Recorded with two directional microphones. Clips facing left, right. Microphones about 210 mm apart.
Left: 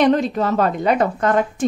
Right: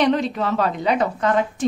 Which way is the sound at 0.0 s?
45° left (ahead or behind).